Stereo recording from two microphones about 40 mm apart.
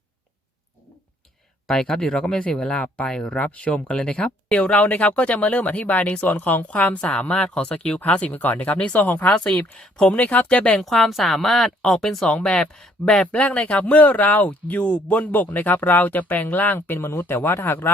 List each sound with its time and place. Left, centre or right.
1.6 s speech: centre
2.4 s speech: left
9.3 s speech: left
9.6 s speech: left
10.8 s a woman's voice: centre
12.3 s speech: left
13.3 s speech: left
15.3 s speech: left
16.8 s speech: left
17.2 s speech: left